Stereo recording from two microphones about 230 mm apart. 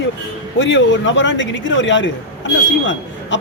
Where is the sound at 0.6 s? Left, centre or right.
Left.